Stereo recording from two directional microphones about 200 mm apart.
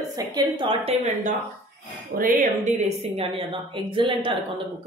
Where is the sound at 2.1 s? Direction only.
45° right (ahead or behind); by 4.3 s 25° right (ahead or behind).